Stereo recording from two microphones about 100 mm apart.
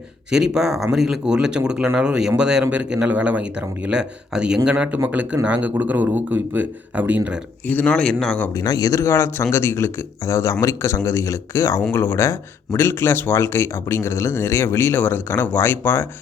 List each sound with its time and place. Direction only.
0.3 s speech: 5° right (ahead or behind)
7.7 s speech: 15° left (ahead or behind)
8.6 s speech: 35° left (ahead or behind)